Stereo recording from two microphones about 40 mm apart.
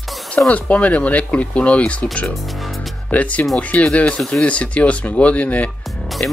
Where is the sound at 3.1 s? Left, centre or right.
Left.